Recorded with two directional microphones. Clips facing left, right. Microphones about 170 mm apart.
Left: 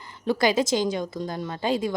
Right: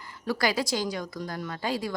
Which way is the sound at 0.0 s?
25° left (ahead or behind).